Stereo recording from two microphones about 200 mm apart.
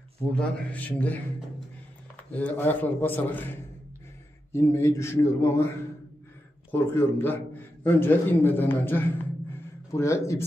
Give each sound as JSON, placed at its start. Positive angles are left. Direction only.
{"t": 0.3, "sound": "a man's voice", "side_deg": 5}
{"t": 2.3, "sound": "a man's voice", "side_deg": 10}
{"t": 6.7, "sound": "a man's voice", "side_deg": 10}